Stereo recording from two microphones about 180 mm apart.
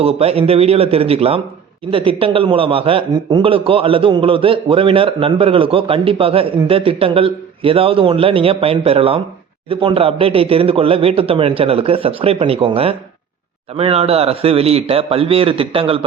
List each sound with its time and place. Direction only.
0.0 s a man's voice: 35° right (ahead or behind)